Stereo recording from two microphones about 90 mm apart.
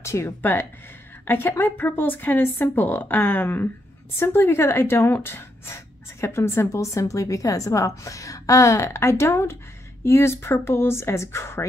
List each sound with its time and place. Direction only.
0.0 s a woman's voice: 30° left (ahead or behind)